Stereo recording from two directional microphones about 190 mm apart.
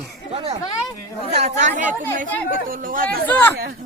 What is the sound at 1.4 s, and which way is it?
Speech, 40° right (ahead or behind).